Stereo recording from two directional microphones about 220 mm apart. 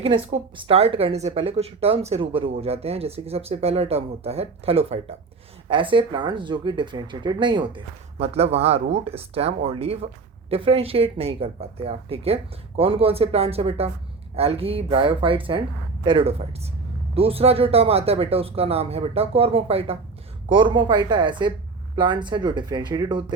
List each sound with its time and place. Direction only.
0.0 s speech: 25° right (ahead or behind)